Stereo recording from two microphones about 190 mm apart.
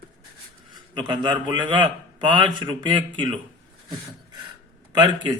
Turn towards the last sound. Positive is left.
turn(degrees=-25)  # may be behind; listen again after turning